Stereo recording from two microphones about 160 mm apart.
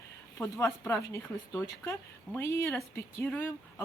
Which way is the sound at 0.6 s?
15° left (ahead or behind).